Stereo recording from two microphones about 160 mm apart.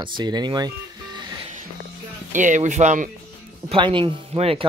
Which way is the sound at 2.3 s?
50° right (ahead or behind).